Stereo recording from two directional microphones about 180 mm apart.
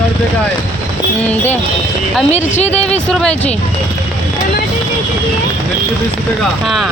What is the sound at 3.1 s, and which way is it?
Speech, 5° left (ahead or behind).